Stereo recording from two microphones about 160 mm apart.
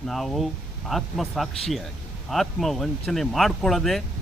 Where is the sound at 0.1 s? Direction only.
Centre (ahead or behind).